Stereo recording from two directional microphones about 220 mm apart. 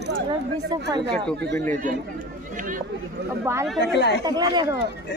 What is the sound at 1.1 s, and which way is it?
Speech, 5° left (ahead or behind).